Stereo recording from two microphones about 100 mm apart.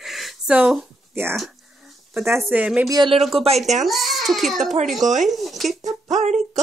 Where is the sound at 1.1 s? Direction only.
25° right (ahead or behind).